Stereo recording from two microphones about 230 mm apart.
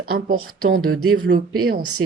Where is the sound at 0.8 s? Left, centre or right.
Right.